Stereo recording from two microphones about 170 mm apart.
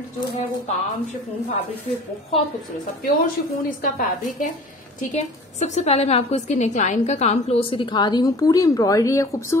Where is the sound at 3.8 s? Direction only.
50° left (ahead or behind).